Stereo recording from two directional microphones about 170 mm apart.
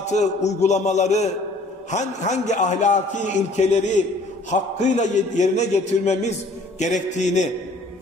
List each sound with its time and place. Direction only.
0.0 s a man's voice: 45° left (ahead or behind)